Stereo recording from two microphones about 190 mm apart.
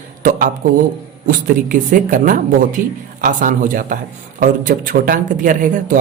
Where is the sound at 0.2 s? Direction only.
50° right (ahead or behind).